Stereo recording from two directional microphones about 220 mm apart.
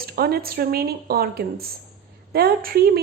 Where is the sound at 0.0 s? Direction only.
45° right (ahead or behind).